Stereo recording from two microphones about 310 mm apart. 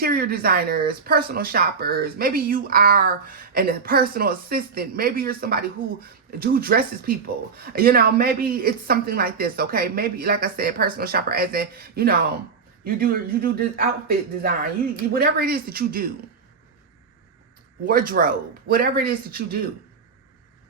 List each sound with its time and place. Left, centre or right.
0.0 s speech: right
15.1 s speech: right
17.8 s speech: right